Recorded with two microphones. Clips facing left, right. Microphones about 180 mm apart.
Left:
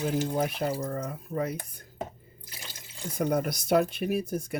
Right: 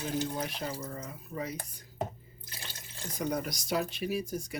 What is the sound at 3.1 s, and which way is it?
Speech, 55° left (ahead or behind).